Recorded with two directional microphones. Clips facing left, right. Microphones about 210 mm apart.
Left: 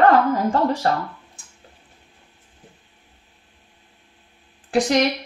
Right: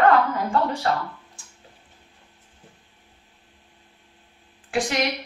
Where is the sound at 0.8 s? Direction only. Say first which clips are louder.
Left 3 dB; 40° left (ahead or behind).